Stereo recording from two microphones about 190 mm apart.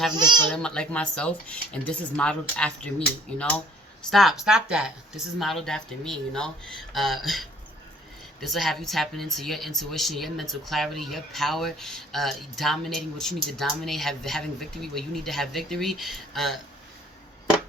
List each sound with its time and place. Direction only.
0.2 s speech: 25° right (ahead or behind)
0.5 s speech: 5° left (ahead or behind)
4.1 s speech: centre (ahead or behind)